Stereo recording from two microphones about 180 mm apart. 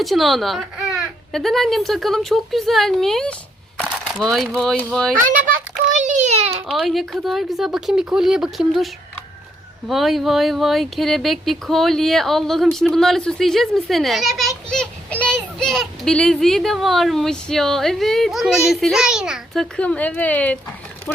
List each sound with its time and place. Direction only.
0.0 s speech: centre (ahead or behind)
3.8 s a sound: 5° left (ahead or behind)
4.4 s speech: centre (ahead or behind)
6.1 s a sound: 40° right (ahead or behind)
6.7 s speech: centre (ahead or behind)
9.9 s speech: centre (ahead or behind)